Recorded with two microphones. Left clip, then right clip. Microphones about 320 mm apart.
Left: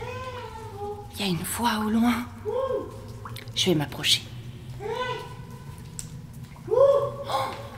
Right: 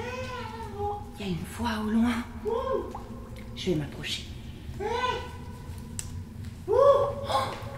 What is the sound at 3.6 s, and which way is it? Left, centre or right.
Speech, left.